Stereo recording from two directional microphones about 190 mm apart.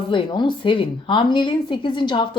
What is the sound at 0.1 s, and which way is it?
Speech, 25° left (ahead or behind).